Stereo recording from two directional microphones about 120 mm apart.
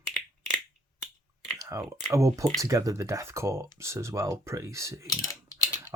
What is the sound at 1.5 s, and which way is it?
Speech, 25° right (ahead or behind).